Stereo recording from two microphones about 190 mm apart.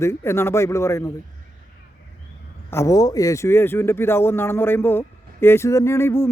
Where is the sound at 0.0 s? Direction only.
15° left (ahead or behind).